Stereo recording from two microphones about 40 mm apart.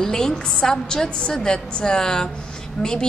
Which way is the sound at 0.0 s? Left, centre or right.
Centre.